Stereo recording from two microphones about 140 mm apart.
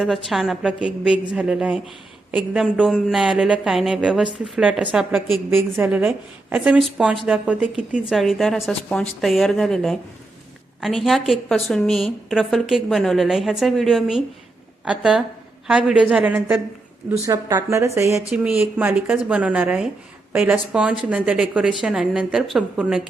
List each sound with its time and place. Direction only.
0.0 s a woman's voice: centre (ahead or behind)
5.5 s a woman's voice: 15° right (ahead or behind)
18.3 s a woman's voice: 10° right (ahead or behind)